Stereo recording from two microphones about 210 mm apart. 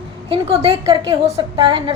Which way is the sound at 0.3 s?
25° right (ahead or behind).